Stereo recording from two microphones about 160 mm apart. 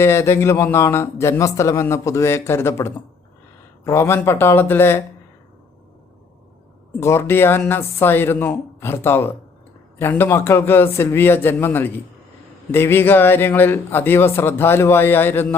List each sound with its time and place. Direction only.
0.0 s a man's voice: 15° left (ahead or behind)
7.0 s a man's voice: 15° left (ahead or behind)